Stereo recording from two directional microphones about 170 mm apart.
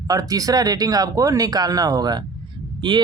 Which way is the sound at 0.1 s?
20° right (ahead or behind).